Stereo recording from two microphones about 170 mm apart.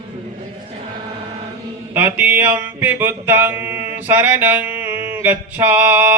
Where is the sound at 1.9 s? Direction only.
10° right (ahead or behind).